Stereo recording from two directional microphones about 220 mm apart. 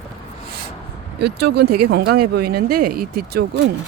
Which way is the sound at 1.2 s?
50° right (ahead or behind).